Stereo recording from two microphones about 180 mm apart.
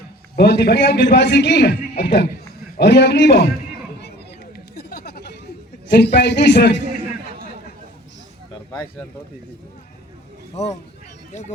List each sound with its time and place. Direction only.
0.3 s a man's voice: 65° left (ahead or behind)
4.5 s a sound: 60° left (ahead or behind)
5.9 s a man's voice: 70° left (ahead or behind)
8.7 s speech: 10° left (ahead or behind)
10.5 s speech: 35° left (ahead or behind)